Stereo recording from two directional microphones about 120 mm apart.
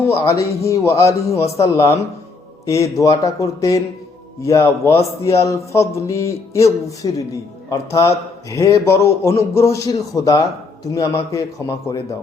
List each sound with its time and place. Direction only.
0.0 s speech: 25° left (ahead or behind)